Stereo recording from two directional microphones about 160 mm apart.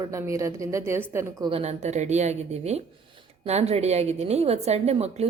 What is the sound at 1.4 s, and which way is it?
A woman's voice, 40° right (ahead or behind).